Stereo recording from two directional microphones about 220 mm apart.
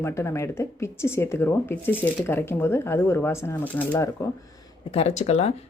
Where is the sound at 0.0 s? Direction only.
10° left (ahead or behind).